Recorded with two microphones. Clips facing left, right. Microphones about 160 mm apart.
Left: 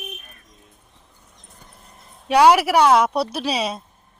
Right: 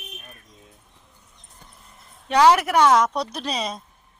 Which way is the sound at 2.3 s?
10° left (ahead or behind).